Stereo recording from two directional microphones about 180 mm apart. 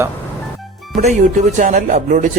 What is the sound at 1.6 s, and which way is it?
Speech, 45° right (ahead or behind).